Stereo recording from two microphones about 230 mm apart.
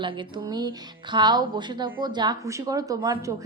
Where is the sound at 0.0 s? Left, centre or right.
Centre.